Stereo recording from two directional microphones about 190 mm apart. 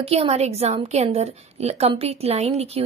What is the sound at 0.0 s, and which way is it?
A woman's voice, 30° right (ahead or behind).